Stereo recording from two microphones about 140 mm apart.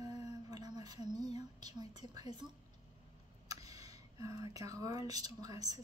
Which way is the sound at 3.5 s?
25° right (ahead or behind).